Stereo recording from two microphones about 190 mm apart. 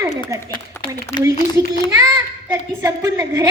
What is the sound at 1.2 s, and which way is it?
A child's voice, 15° right (ahead or behind).